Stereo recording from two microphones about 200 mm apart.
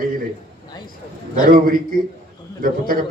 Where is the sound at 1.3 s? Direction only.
45° right (ahead or behind).